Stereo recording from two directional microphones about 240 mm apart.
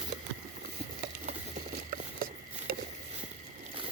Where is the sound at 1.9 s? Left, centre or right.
Right.